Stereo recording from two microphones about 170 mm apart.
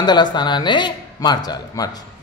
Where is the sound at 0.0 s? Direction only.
25° left (ahead or behind).